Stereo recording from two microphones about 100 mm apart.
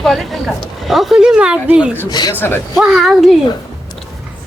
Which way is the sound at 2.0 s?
45° left (ahead or behind).